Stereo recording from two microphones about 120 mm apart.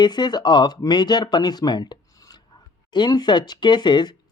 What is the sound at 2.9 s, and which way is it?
Speech, 40° left (ahead or behind).